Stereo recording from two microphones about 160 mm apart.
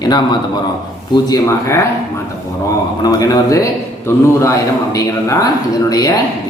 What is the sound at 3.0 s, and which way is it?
Speech, 25° left (ahead or behind).